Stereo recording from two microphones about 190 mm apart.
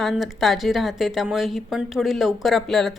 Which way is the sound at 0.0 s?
Centre (ahead or behind).